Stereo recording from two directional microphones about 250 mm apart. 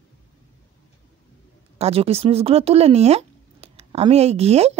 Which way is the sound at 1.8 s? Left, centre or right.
Right.